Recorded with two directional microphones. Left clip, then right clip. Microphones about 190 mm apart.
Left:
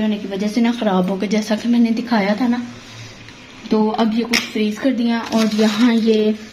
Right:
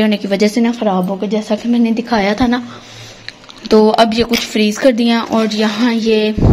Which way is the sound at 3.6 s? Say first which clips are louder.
Right 9 dB; 50° right (ahead or behind).